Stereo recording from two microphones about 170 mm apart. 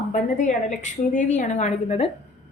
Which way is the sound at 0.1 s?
45° left (ahead or behind).